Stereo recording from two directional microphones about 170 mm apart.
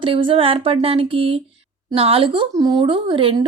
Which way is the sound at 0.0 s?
30° right (ahead or behind).